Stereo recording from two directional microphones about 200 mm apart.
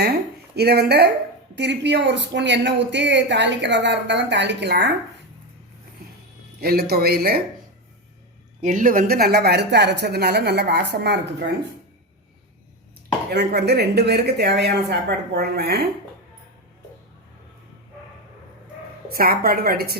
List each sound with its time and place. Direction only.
0.5 s a woman's voice: 55° right (ahead or behind)
6.6 s a woman's voice: 50° right (ahead or behind)
8.6 s speech: 40° right (ahead or behind); by 11.4 s 55° right (ahead or behind)
13.3 s speech: 55° right (ahead or behind)
19.0 s a woman's voice: 50° right (ahead or behind)